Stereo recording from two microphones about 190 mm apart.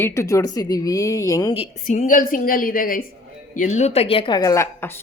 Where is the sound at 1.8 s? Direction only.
45° left (ahead or behind).